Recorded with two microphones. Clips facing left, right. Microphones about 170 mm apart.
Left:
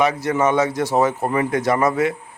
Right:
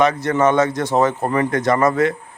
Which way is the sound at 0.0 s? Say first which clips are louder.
Right 2 dB; 10° left (ahead or behind).